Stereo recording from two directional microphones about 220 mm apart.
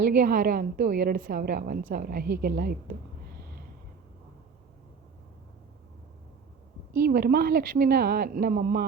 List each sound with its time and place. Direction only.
0.2 s a woman's voice: 40° right (ahead or behind)
7.1 s a woman's voice: 40° right (ahead or behind)